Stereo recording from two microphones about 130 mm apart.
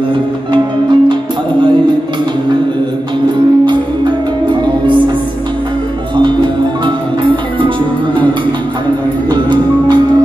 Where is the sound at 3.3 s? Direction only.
35° right (ahead or behind).